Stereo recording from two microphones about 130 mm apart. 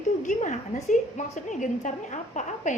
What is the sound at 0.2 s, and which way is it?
A woman's voice, 70° left (ahead or behind).